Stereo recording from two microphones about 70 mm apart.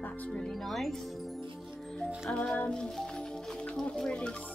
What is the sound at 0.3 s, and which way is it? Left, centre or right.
Speech, centre.